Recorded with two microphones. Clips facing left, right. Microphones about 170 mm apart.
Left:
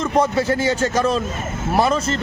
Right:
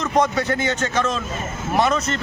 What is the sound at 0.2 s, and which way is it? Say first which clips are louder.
A man's voice: left 2 dB; 30° left (ahead or behind).